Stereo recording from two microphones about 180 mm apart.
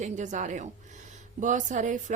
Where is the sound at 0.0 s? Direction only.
40° right (ahead or behind).